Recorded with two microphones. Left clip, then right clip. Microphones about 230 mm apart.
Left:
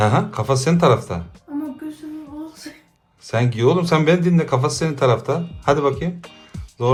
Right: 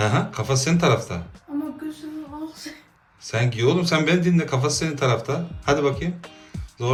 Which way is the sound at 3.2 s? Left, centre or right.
Centre.